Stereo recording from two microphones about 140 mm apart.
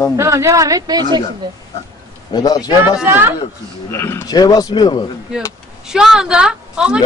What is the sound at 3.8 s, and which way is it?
A man's voice, 15° left (ahead or behind).